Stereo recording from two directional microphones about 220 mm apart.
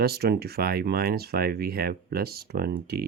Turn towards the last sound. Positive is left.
turn(degrees=-45)  # may be behind; listen again after turning